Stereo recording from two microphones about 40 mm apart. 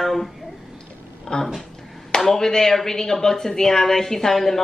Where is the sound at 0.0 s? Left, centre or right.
Centre.